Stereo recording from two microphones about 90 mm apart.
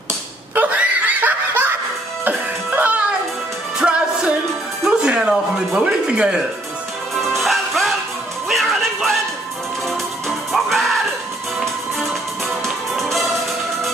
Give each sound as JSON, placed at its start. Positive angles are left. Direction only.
{"t": 0.6, "sound": "snicker", "side_deg": -15}
{"t": 2.2, "sound": "music", "side_deg": -20}
{"t": 5.9, "sound": "speech", "side_deg": -10}
{"t": 7.2, "sound": "music", "side_deg": 0}
{"t": 12.1, "sound": "music", "side_deg": 0}